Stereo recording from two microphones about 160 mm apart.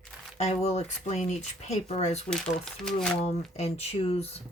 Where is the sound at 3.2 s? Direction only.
40° left (ahead or behind).